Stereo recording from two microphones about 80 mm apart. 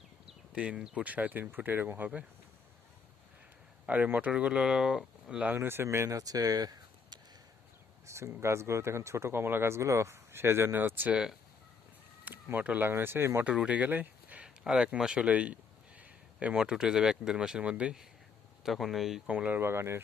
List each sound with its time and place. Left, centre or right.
0.5 s speech: centre
3.8 s speech: centre
5.5 s speech: right
6.1 s speech: right
8.0 s speech: right
12.2 s speech: right
13.4 s speech: centre
14.4 s speech: centre
18.6 s speech: centre
19.3 s speech: centre
19.5 s speech: right